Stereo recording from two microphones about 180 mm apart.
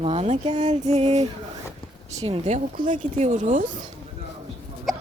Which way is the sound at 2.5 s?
45° right (ahead or behind).